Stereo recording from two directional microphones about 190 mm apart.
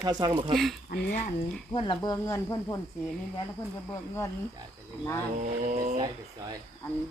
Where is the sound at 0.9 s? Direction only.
50° left (ahead or behind).